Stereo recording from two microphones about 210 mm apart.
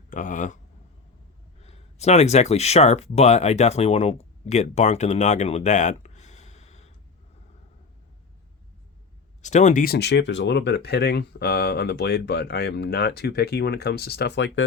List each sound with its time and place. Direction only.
0.1 s speech: 40° left (ahead or behind)
1.6 s speech: 30° left (ahead or behind)
9.4 s speech: 35° left (ahead or behind); by 14.6 s 60° left (ahead or behind)